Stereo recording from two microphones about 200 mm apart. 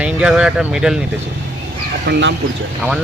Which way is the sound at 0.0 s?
5° right (ahead or behind).